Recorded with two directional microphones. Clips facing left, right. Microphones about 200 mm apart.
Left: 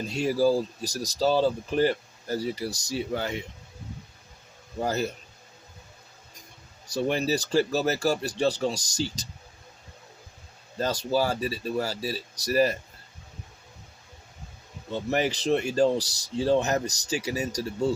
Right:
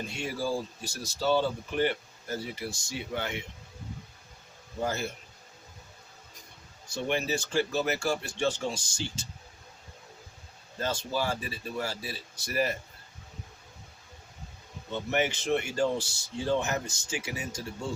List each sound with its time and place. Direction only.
0.1 s speech: 35° left (ahead or behind)
4.8 s speech: 40° left (ahead or behind)
6.8 s speech: 35° left (ahead or behind)
10.8 s speech: 40° left (ahead or behind)
14.9 s speech: 35° left (ahead or behind)